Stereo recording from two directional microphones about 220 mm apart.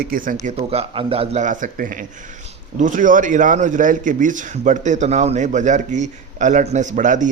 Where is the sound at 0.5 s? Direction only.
25° right (ahead or behind).